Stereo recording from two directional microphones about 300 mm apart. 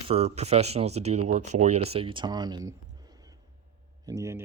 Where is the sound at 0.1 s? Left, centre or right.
Right.